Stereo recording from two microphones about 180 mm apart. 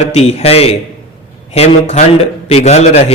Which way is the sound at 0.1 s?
35° left (ahead or behind).